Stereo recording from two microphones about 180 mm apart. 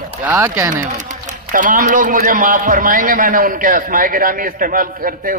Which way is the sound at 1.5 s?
50° right (ahead or behind).